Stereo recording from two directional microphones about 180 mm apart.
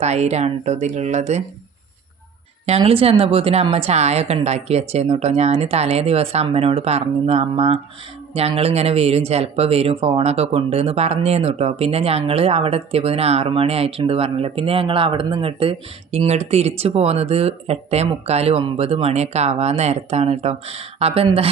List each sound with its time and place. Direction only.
0.0 s speech: 35° right (ahead or behind)
2.6 s speech: 35° right (ahead or behind)